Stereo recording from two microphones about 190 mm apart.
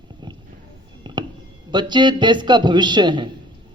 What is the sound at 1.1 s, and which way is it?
Music, 25° right (ahead or behind).